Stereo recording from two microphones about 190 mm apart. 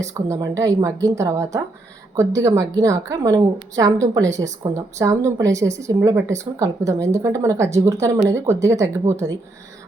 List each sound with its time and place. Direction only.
0.0 s a woman's voice: 15° right (ahead or behind)